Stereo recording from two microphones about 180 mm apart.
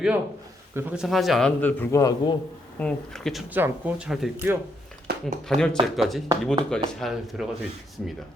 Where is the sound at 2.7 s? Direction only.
5° left (ahead or behind).